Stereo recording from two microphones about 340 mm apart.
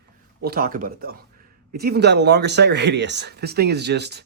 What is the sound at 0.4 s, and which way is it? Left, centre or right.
Speech, right.